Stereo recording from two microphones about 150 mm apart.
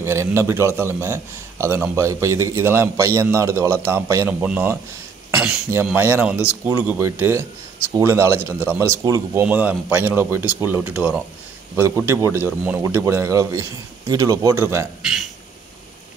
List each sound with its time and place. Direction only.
0.0 s a man's voice: 20° right (ahead or behind)
5.3 s cough: 5° right (ahead or behind)
5.9 s a man's voice: 15° right (ahead or behind)